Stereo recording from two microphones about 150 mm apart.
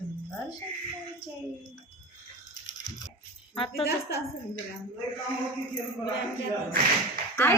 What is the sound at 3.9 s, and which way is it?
Speech, 90° left.